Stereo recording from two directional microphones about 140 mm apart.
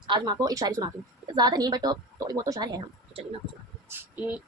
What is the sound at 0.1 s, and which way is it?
A woman's voice, 30° right (ahead or behind).